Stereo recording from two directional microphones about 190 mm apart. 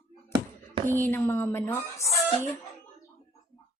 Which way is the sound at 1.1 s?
15° left (ahead or behind).